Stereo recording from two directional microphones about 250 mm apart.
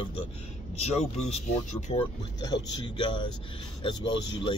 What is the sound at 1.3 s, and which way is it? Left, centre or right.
A man's voice, left.